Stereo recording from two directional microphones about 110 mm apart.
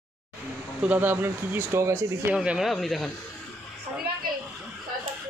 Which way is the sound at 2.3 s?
10° right (ahead or behind).